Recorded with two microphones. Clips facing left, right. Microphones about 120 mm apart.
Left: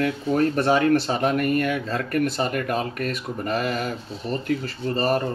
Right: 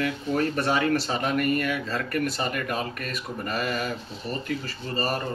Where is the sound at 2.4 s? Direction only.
65° left (ahead or behind).